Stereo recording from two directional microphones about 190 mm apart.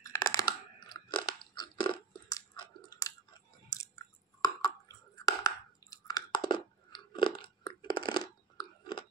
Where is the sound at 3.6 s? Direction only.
15° left (ahead or behind).